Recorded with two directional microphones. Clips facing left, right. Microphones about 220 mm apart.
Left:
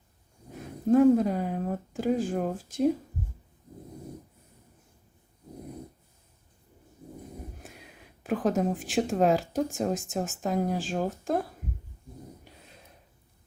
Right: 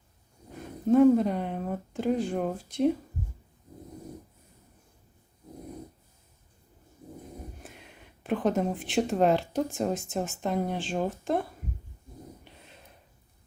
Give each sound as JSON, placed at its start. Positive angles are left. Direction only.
{"t": 0.5, "sound": "speech", "side_deg": 0}
{"t": 7.6, "sound": "speech", "side_deg": 0}